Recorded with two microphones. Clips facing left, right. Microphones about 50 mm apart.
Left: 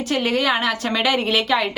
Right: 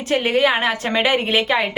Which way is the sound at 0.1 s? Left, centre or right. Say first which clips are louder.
Right 3 dB; right.